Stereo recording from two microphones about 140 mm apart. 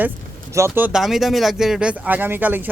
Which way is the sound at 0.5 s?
20° right (ahead or behind).